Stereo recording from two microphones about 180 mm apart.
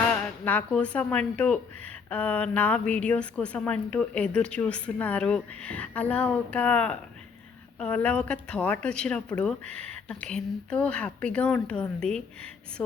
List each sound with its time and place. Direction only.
0.1 s speech: 10° left (ahead or behind)